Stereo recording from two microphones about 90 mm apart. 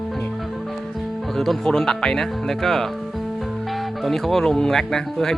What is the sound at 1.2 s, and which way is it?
Speech, 5° left (ahead or behind).